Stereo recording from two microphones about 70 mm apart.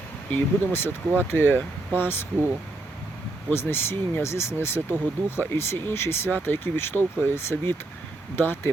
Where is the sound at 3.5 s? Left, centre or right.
Left.